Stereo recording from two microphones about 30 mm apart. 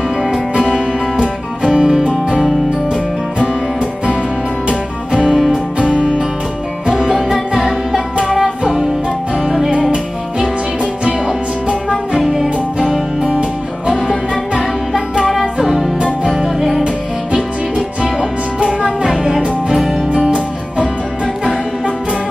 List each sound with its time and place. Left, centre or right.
0.6 s music: right
4.6 s music: right
7.0 s music: centre